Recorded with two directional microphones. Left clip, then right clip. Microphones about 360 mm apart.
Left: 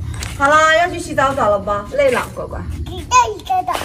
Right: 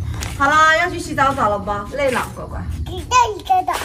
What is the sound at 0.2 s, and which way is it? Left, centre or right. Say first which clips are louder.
A woman's voice: left 1 dB; right.